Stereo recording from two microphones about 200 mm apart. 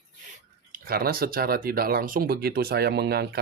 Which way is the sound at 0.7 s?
50° right (ahead or behind).